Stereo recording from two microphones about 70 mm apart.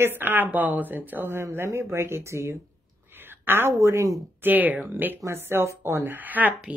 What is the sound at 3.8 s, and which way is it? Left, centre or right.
Speech, right.